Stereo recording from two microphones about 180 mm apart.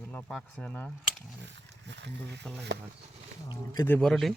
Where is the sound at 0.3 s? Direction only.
5° left (ahead or behind).